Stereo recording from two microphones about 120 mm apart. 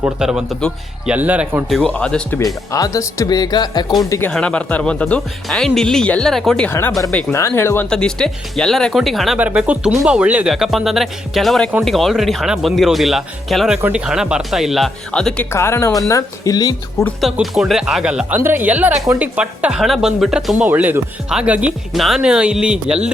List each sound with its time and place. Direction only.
0.0 s a woman's voice: 5° right (ahead or behind)
1.7 s speech: 5° left (ahead or behind)
2.7 s speech: 30° left (ahead or behind)
4.2 s speech: 10° left (ahead or behind)
6.7 s speech: 15° left (ahead or behind)
7.3 s speech: 25° left (ahead or behind)
7.9 s speech: 5° left (ahead or behind)
9.4 s a woman's voice: 10° right (ahead or behind); by 15.4 s 5° left (ahead or behind)
15.5 s speech: 20° left (ahead or behind)
17.4 s a woman's voice: centre (ahead or behind)
20.7 s a woman's voice: 15° right (ahead or behind)